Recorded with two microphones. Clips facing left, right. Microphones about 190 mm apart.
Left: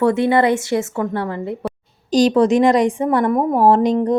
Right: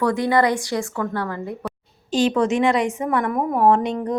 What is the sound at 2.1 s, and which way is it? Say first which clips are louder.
A woman's voice: left 5 dB; 40° left (ahead or behind).